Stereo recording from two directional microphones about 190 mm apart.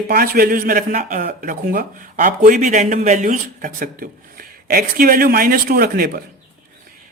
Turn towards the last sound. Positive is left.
turn(degrees=-50)  # may be behind; listen again after turning